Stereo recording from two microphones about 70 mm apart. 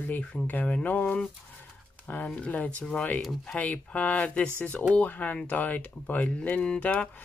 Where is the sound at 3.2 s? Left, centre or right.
Centre.